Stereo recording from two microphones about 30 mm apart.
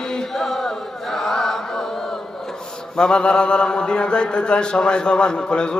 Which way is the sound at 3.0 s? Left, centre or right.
Left.